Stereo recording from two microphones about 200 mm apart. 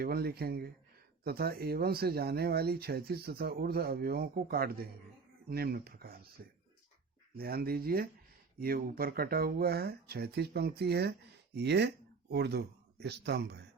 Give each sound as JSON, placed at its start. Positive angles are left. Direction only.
{"t": 0.0, "sound": "speech", "side_deg": -50}